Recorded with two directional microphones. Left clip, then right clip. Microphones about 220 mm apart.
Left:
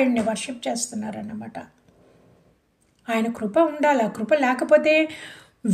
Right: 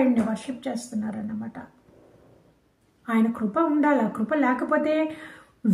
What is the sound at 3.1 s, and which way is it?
Speech, 40° left (ahead or behind).